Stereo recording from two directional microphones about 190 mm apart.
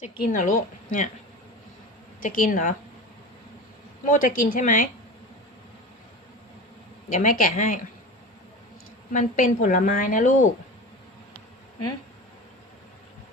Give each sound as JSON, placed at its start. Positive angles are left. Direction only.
{"t": 0.2, "sound": "a woman's voice", "side_deg": 45}
{"t": 2.2, "sound": "a woman's voice", "side_deg": 45}
{"t": 4.0, "sound": "a woman's voice", "side_deg": 45}
{"t": 7.1, "sound": "speech", "side_deg": 40}
{"t": 9.1, "sound": "a woman's voice", "side_deg": 40}